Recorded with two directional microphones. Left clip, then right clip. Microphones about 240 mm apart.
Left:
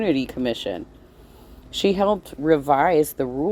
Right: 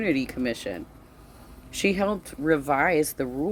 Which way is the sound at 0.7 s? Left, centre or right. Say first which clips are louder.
Left 5 dB; centre.